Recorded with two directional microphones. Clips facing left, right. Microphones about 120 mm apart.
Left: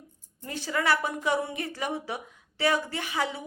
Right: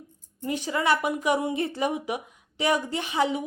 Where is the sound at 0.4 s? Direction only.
20° right (ahead or behind).